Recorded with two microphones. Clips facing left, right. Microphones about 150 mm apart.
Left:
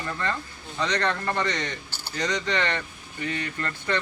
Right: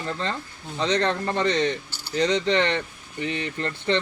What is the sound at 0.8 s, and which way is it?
Speech, 20° right (ahead or behind).